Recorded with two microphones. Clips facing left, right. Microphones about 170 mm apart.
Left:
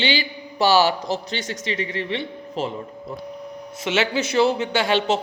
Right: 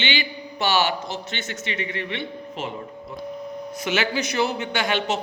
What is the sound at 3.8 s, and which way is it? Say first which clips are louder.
A man's voice: left 3 dB; 25° left (ahead or behind).